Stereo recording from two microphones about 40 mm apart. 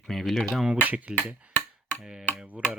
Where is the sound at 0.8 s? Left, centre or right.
Right.